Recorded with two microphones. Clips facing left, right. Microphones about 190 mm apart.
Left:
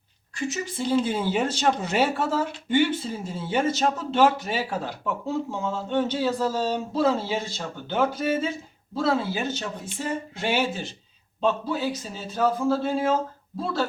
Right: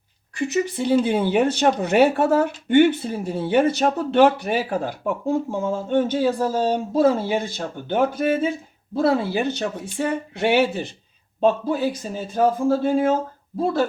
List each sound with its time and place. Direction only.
0.3 s speech: 65° right (ahead or behind)
11.3 s a man's voice: 50° right (ahead or behind)